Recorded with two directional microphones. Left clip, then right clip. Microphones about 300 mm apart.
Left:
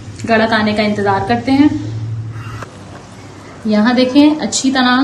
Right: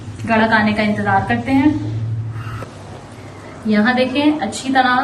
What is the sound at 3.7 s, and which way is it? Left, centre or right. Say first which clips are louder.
A woman's voice: left 3 dB; centre.